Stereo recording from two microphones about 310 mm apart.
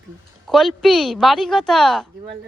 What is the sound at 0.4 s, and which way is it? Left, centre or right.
Speech, centre.